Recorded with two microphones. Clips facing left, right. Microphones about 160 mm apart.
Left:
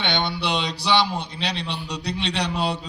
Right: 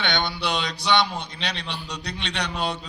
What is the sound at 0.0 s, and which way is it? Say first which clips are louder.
A man's voice: left 1 dB; 30° left (ahead or behind).